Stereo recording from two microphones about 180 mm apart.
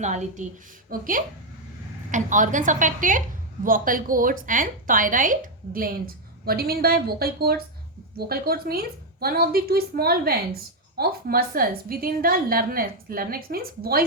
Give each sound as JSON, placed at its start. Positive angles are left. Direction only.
{"t": 0.0, "sound": "a woman's voice", "side_deg": -40}